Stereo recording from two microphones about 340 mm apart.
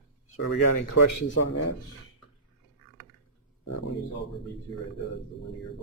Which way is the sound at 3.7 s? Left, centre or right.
Left.